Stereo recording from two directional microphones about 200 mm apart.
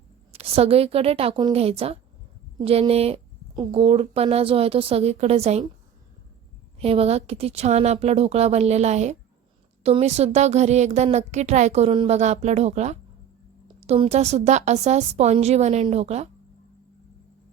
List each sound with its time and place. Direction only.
0.3 s a woman's voice: 30° right (ahead or behind)
6.7 s a woman's voice: 30° right (ahead or behind)